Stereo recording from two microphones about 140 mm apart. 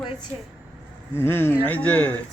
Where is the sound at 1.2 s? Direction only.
15° left (ahead or behind).